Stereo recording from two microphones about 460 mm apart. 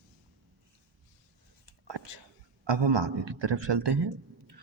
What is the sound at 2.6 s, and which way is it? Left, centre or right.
A man's voice, right.